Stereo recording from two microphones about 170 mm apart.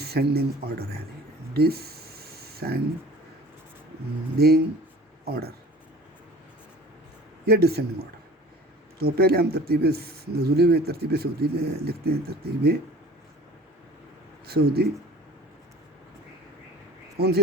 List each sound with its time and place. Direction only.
0.0 s speech: 70° right (ahead or behind)
1.5 s a sound: 70° right (ahead or behind)
4.4 s speech: 70° right (ahead or behind)
7.4 s speech: 70° right (ahead or behind)
14.4 s speech: 65° right (ahead or behind)
17.2 s speech: 70° right (ahead or behind)